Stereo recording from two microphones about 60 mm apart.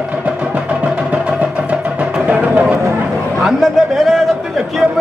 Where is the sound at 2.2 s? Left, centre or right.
Right.